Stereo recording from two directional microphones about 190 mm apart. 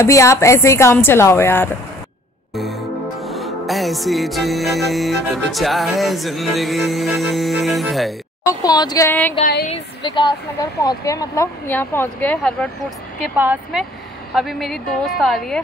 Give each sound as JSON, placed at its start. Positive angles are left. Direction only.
{"t": 0.0, "sound": "speech", "side_deg": 15}
{"t": 2.5, "sound": "music", "side_deg": 0}
{"t": 8.5, "sound": "speech", "side_deg": 20}
{"t": 10.0, "sound": "speech", "side_deg": 25}
{"t": 13.2, "sound": "music", "side_deg": -5}